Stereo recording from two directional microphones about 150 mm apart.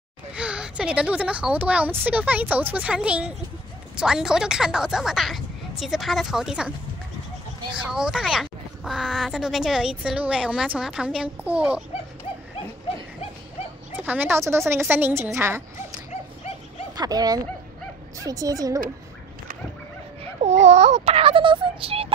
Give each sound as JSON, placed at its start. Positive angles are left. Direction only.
{"t": 0.3, "sound": "a woman's voice", "side_deg": -5}
{"t": 7.7, "sound": "speech", "side_deg": -5}
{"t": 13.9, "sound": "a woman's voice", "side_deg": -10}
{"t": 16.1, "sound": "dog", "side_deg": 45}
{"t": 16.9, "sound": "speech", "side_deg": -25}
{"t": 20.4, "sound": "speech", "side_deg": -50}